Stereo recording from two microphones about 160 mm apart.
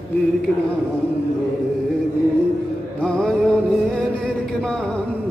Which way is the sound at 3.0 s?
5° left (ahead or behind).